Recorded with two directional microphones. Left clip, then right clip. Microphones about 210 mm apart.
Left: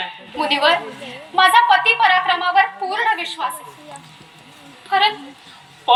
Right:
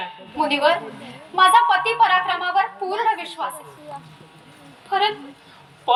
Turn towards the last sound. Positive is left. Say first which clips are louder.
# left 4 dB
turn(degrees=-60)  # may be behind; listen again after turning